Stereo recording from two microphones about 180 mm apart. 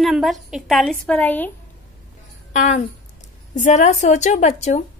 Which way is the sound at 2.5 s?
45° left (ahead or behind).